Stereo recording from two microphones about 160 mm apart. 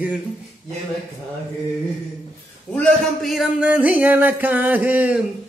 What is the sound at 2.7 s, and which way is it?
A man's voice, 5° left (ahead or behind).